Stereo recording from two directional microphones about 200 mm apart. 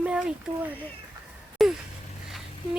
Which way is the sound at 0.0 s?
5° right (ahead or behind).